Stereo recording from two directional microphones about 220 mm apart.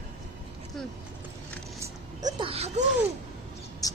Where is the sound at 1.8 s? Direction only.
20° right (ahead or behind).